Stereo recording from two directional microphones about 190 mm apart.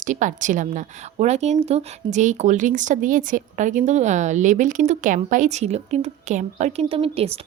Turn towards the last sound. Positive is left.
turn(degrees=-30)  # may be behind; listen again after turning